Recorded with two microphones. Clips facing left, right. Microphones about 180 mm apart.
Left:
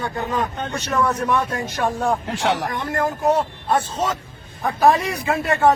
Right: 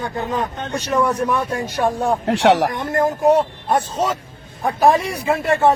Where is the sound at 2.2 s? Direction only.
75° right (ahead or behind).